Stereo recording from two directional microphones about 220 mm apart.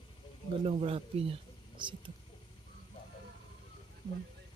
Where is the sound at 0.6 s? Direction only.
25° right (ahead or behind).